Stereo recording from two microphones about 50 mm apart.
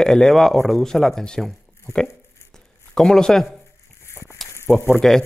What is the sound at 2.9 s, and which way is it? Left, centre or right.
Speech, centre.